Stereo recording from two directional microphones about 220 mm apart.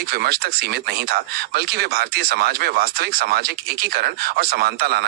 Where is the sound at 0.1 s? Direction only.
45° right (ahead or behind).